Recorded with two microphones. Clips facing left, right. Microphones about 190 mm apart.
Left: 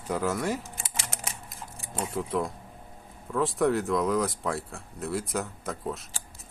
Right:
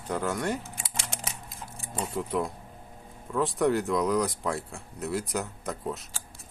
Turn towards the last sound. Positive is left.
turn(degrees=0)  # may be behind; listen again after turning